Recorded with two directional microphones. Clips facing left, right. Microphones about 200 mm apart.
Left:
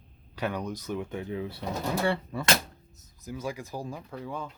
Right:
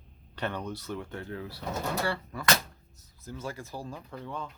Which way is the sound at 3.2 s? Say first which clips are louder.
Left 3 dB; 10° left (ahead or behind).